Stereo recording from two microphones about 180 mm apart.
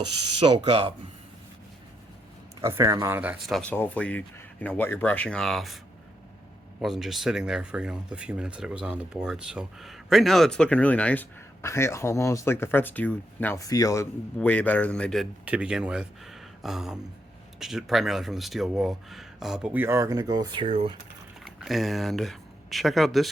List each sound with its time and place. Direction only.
0.3 s speech: 30° right (ahead or behind)
2.6 s speech: 15° right (ahead or behind)
3.6 s speech: 10° left (ahead or behind)
6.8 s speech: centre (ahead or behind); by 21.0 s 30° right (ahead or behind)
21.4 s speech: centre (ahead or behind)